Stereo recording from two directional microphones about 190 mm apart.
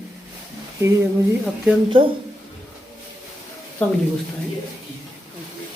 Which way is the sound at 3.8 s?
10° left (ahead or behind).